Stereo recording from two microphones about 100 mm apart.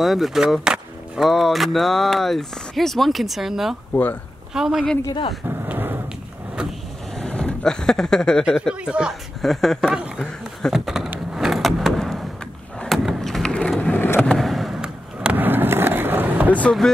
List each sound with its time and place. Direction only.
0.0 s speech: centre (ahead or behind)
3.9 s speech: 20° left (ahead or behind)
4.6 s speech: 5° right (ahead or behind)
5.5 s a sound: 20° right (ahead or behind)
7.2 s vehicle: 10° left (ahead or behind)
8.5 s speech: centre (ahead or behind)
9.4 s speech: 5° left (ahead or behind)
10.7 s a sound: 5° right (ahead or behind)
11.3 s vehicle: 5° right (ahead or behind)
12.8 s skateboard: centre (ahead or behind); by 14.2 s 20° left (ahead or behind)
14.2 s a sound: 5° left (ahead or behind)
15.3 s skateboard: 20° right (ahead or behind)